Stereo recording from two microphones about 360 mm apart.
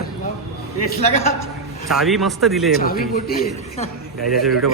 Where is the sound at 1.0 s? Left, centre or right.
Centre.